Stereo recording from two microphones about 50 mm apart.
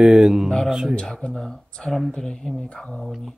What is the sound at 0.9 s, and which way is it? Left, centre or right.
Speech, centre.